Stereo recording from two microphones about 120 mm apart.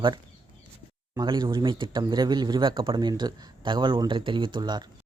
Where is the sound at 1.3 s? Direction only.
40° right (ahead or behind).